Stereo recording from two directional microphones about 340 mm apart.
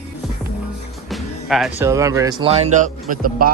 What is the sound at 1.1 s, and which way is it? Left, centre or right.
Speech, centre.